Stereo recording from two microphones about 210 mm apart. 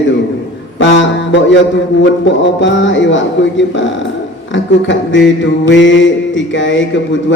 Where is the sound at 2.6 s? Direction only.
60° left (ahead or behind).